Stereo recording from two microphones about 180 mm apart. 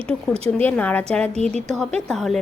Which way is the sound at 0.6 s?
10° left (ahead or behind).